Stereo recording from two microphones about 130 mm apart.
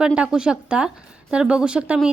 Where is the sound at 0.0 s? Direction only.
5° right (ahead or behind).